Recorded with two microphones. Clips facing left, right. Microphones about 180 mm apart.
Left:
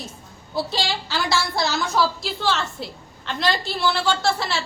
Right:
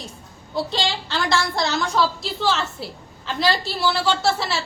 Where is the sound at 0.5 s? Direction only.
5° left (ahead or behind).